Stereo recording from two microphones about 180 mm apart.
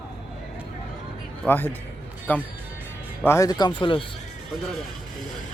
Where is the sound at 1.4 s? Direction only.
10° left (ahead or behind); by 4.0 s 25° left (ahead or behind).